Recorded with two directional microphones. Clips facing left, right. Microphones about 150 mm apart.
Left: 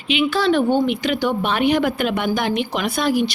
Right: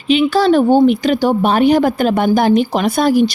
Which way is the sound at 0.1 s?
40° right (ahead or behind).